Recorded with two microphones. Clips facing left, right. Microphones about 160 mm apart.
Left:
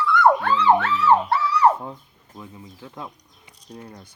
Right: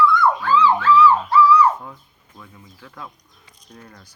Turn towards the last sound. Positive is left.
turn(degrees=25)  # may be behind; listen again after turning